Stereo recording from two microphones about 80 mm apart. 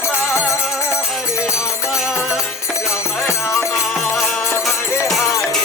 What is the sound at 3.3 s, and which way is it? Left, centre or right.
Music, left.